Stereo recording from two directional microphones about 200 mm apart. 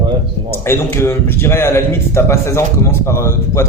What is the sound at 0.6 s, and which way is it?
A man's voice, 10° left (ahead or behind).